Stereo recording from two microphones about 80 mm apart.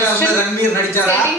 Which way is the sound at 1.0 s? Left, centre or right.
Left.